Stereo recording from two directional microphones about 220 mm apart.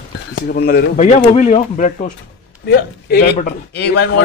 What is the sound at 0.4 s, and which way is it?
Speech, 45° left (ahead or behind).